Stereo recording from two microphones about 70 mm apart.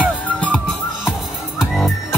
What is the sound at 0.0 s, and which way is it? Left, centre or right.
Music, centre.